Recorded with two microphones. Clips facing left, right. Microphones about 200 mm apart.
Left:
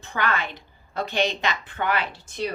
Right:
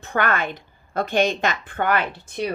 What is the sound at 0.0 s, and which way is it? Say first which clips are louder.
A woman's voice: right 4 dB; 50° right (ahead or behind).